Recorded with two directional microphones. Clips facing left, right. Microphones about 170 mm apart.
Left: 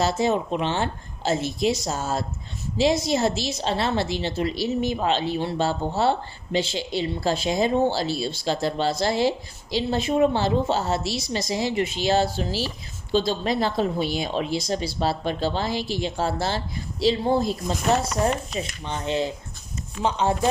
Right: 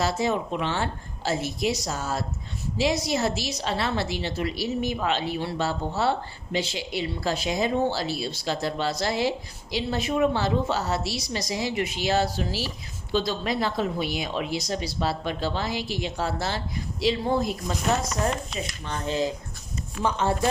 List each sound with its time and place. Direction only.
0.0 s a woman's voice: 25° left (ahead or behind)
18.9 s a woman's voice: 25° left (ahead or behind)